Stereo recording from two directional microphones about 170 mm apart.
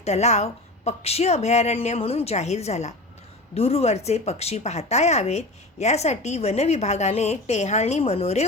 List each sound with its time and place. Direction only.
0.0 s speech: 40° left (ahead or behind)